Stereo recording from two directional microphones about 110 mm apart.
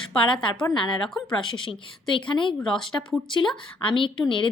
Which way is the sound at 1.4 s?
50° left (ahead or behind).